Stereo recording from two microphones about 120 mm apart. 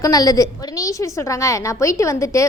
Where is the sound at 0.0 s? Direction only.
30° left (ahead or behind).